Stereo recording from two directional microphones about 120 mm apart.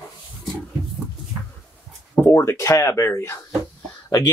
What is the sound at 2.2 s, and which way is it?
Speech, 20° left (ahead or behind).